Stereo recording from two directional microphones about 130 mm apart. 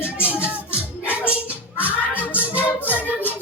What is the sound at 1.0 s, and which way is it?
Music, 15° left (ahead or behind).